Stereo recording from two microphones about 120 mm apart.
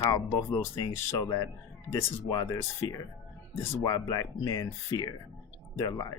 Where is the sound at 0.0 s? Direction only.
25° left (ahead or behind).